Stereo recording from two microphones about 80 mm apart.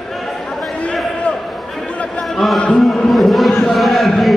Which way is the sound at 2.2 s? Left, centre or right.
Centre.